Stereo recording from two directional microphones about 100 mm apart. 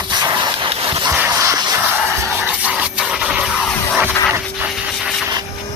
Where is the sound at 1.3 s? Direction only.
35° right (ahead or behind).